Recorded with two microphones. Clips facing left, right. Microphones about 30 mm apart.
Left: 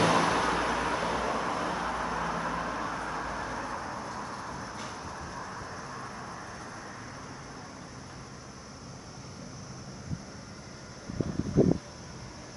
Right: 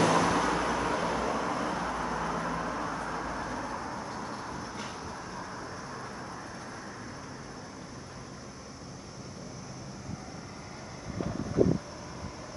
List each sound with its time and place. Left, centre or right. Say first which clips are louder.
0.0 s vehicle: even; left; by 4.6 s centre